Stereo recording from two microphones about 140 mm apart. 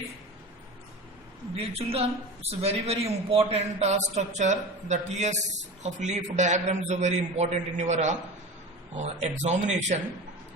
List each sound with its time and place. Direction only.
1.5 s a man's voice: 45° right (ahead or behind)